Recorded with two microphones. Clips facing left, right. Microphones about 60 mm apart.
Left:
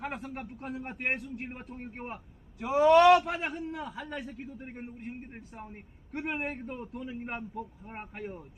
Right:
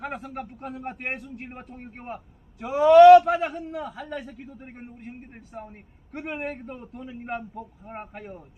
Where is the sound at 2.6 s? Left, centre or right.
Centre.